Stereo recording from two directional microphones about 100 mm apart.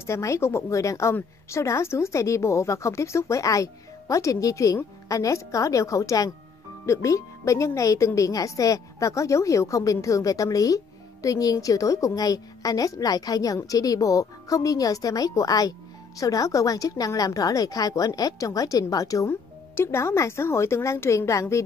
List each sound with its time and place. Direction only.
0.0 s a woman's voice: 30° left (ahead or behind)